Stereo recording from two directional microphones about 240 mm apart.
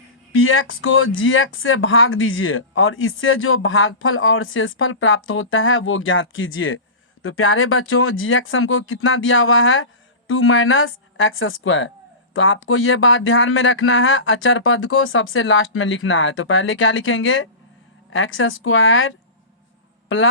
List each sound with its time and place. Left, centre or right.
0.3 s speech: left